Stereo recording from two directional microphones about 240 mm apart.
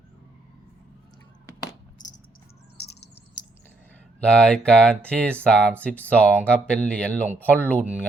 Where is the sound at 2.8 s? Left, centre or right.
Left.